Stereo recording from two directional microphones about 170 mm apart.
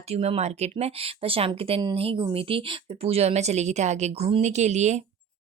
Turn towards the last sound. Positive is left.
turn(degrees=-45)  # may be behind; listen again after turning